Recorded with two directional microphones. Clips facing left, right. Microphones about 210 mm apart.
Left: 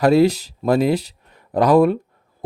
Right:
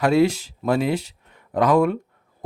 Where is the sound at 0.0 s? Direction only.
35° left (ahead or behind).